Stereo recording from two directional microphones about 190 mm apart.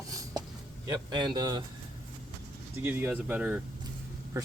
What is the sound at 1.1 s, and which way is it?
Speech, 25° right (ahead or behind).